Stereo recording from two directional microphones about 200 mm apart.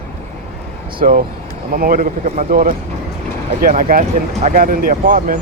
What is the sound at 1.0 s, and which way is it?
Speech, 45° right (ahead or behind).